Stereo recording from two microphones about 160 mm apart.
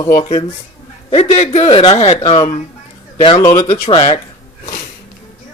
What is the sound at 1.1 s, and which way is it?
A man's voice, 40° left (ahead or behind).